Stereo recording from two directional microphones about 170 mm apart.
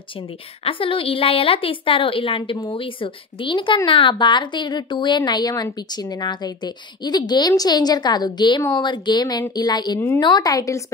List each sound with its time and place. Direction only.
0.7 s a woman's voice: 30° left (ahead or behind)